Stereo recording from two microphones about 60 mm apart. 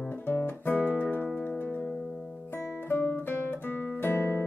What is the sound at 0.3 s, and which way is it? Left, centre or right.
Music, left.